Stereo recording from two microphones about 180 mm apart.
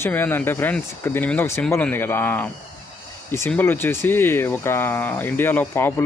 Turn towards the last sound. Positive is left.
turn(degrees=10)  # may be behind; listen again after turning